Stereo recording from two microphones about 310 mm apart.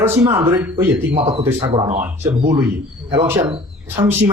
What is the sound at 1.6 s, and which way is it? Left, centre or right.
Speech, centre.